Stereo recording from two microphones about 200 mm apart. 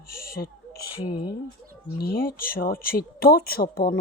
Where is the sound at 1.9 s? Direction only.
50° left (ahead or behind).